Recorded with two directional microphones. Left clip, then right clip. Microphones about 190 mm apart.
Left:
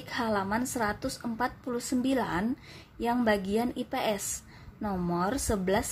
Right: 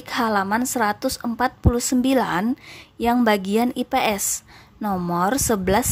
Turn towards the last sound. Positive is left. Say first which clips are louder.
# right 9 dB
turn(degrees=-35)  # may be behind; listen again after turning